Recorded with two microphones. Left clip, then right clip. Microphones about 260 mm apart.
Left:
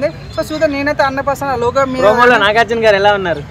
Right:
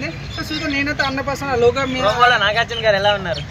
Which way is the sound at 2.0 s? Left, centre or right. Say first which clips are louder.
Left 7 dB; left.